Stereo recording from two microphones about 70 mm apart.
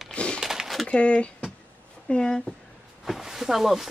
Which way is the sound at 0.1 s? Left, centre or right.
Centre.